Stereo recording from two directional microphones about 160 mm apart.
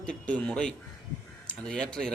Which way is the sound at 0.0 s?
5° left (ahead or behind).